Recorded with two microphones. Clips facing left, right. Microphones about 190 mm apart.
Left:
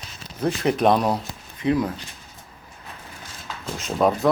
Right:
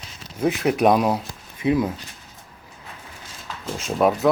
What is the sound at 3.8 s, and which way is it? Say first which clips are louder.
Speech: right 1 dB; 5° right (ahead or behind).